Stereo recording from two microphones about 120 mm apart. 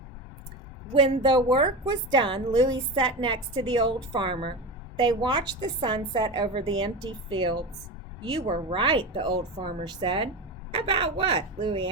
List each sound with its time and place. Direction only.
0.9 s a woman's voice: 45° right (ahead or behind)